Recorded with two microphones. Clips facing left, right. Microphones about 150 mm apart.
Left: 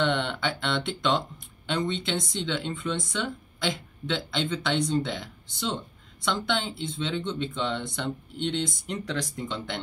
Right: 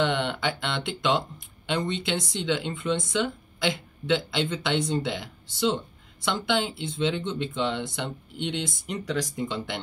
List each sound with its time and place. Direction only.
0.0 s speech: 5° right (ahead or behind)